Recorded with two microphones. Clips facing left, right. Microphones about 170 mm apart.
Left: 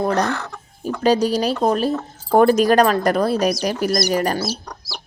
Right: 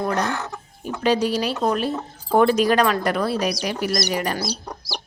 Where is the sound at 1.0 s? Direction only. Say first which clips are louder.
Left 3 dB; 40° left (ahead or behind).